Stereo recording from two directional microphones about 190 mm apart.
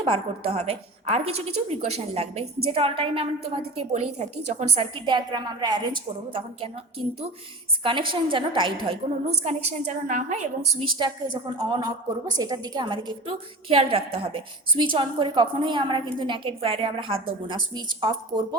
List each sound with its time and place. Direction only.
0.0 s a woman's voice: 30° right (ahead or behind)
7.9 s a woman's voice: 25° right (ahead or behind)
10.9 s a woman's voice: 25° right (ahead or behind)